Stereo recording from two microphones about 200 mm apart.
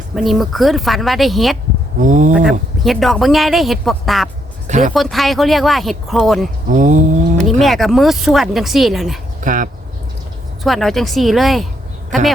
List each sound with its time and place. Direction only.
0.1 s speech: centre (ahead or behind)
2.0 s speech: 40° right (ahead or behind)
2.3 s speech: centre (ahead or behind)
4.6 s a sound: 40° right (ahead or behind)
4.9 s speech: centre (ahead or behind)
6.7 s speech: 40° right (ahead or behind)
7.6 s speech: centre (ahead or behind)
9.4 s speech: 40° right (ahead or behind)
10.6 s speech: centre (ahead or behind)